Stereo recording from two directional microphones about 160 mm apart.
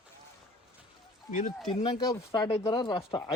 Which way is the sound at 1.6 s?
25° left (ahead or behind).